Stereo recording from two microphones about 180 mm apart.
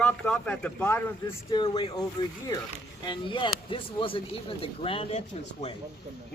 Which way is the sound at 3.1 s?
25° left (ahead or behind).